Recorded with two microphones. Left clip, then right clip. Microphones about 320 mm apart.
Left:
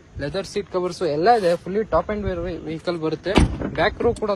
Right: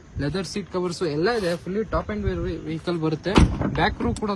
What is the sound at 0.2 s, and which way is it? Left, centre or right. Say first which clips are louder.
Speech: left 3 dB; centre.